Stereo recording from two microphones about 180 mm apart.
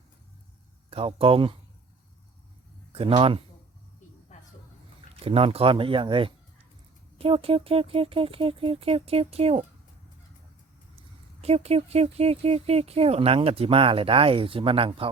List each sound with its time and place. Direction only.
0.9 s speech: 30° right (ahead or behind)
2.9 s speech: 30° right (ahead or behind)
5.2 s speech: 30° right (ahead or behind)
10.9 s speech: 35° right (ahead or behind)